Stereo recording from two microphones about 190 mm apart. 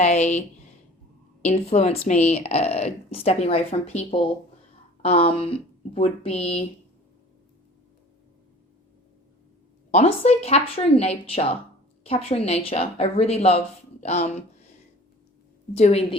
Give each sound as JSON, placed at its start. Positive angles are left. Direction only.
{"t": 0.0, "sound": "speech", "side_deg": 35}
{"t": 1.5, "sound": "speech", "side_deg": 35}
{"t": 9.9, "sound": "speech", "side_deg": 30}
{"t": 15.7, "sound": "speech", "side_deg": 35}